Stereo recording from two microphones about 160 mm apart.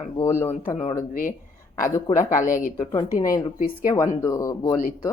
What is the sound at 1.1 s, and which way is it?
A woman's voice, 55° left (ahead or behind).